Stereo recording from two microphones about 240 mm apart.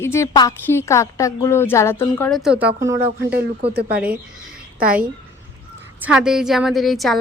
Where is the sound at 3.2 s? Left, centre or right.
Right.